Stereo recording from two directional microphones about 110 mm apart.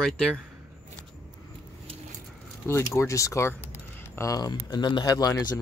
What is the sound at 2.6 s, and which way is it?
Speech, 25° left (ahead or behind).